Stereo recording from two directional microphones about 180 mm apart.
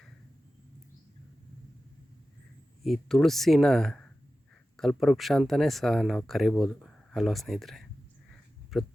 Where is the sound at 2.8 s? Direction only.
Centre (ahead or behind).